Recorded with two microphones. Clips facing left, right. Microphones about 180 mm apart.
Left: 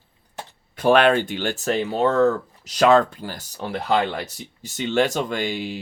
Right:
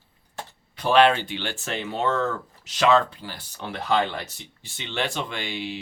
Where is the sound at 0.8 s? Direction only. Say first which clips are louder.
Left 2 dB; 50° left (ahead or behind).